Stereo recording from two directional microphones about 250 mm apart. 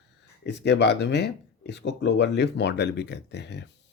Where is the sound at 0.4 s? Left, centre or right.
Left.